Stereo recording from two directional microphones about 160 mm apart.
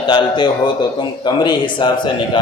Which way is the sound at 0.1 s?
30° left (ahead or behind).